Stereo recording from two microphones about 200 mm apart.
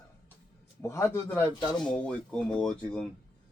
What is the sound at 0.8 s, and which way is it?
Speech, 15° left (ahead or behind).